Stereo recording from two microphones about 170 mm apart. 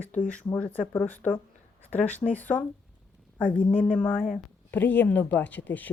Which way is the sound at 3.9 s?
10° left (ahead or behind).